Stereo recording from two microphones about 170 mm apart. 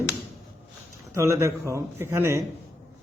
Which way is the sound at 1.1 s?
15° right (ahead or behind).